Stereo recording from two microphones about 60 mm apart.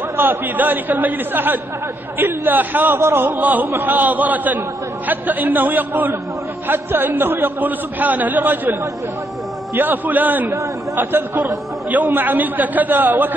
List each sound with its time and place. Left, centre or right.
0.2 s a man's voice: right
3.3 s a man's voice: right
9.8 s a man's voice: right